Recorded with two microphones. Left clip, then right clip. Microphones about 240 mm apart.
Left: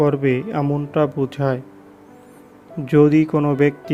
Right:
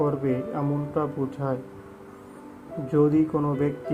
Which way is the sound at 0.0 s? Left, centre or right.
Left.